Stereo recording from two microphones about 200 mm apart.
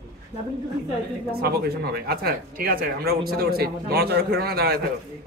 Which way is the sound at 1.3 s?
50° right (ahead or behind).